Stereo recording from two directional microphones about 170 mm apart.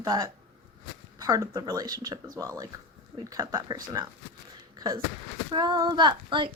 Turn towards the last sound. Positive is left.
turn(degrees=-25)  # may be behind; listen again after turning